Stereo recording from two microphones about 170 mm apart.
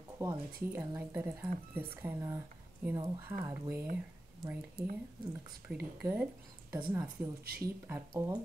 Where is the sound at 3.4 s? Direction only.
15° right (ahead or behind).